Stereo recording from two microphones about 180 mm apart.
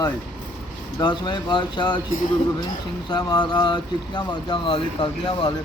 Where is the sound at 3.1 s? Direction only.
25° left (ahead or behind).